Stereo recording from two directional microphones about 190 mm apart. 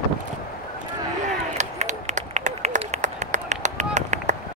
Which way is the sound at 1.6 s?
35° right (ahead or behind).